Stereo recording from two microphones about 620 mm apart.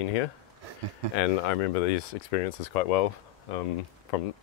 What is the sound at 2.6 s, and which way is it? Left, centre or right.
Speech, left.